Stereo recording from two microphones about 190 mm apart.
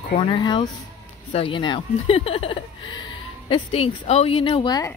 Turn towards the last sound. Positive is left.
turn(degrees=20)  # may be behind; listen again after turning